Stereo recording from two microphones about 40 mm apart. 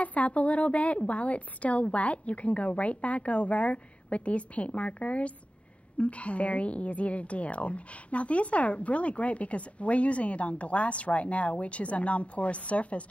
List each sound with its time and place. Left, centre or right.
0.0 s a woman's voice: left